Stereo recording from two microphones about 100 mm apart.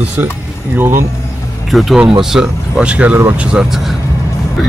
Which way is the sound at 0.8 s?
25° right (ahead or behind).